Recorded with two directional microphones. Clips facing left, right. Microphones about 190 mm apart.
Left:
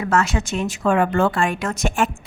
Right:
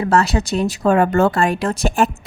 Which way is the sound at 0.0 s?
35° right (ahead or behind).